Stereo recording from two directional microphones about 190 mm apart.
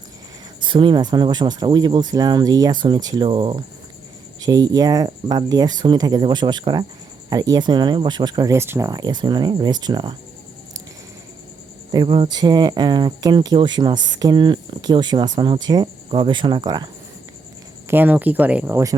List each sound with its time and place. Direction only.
0.6 s speech: 25° right (ahead or behind)
11.9 s speech: 25° right (ahead or behind)
17.8 s speech: 10° right (ahead or behind)